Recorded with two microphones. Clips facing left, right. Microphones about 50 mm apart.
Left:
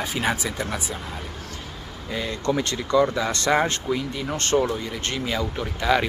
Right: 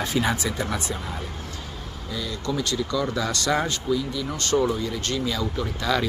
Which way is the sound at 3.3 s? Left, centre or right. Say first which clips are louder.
Left 3 dB; left.